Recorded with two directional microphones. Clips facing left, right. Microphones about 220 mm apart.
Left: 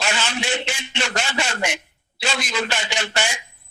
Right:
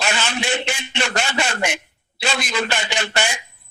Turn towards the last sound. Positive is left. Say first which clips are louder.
# right 2 dB
turn(degrees=-60)  # may be behind; listen again after turning